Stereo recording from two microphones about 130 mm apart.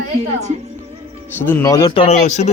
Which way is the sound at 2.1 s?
65° left (ahead or behind).